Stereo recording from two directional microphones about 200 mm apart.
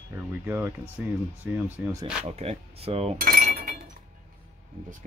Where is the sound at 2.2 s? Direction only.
30° right (ahead or behind).